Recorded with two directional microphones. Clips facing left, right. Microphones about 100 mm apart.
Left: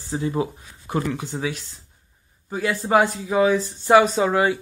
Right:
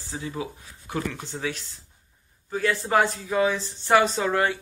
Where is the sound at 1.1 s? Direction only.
10° left (ahead or behind).